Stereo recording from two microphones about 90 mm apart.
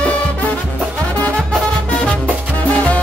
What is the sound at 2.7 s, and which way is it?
Music, 15° left (ahead or behind).